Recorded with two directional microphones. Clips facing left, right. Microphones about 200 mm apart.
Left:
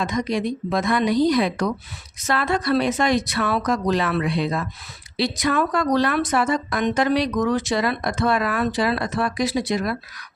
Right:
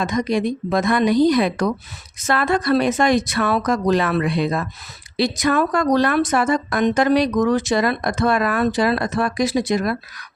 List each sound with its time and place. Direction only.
0.0 s speech: 50° right (ahead or behind)